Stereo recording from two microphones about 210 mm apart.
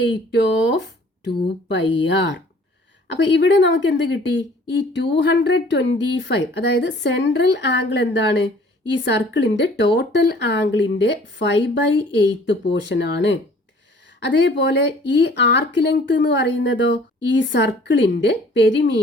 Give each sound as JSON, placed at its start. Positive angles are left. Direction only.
{"t": 0.3, "sound": "speech", "side_deg": 55}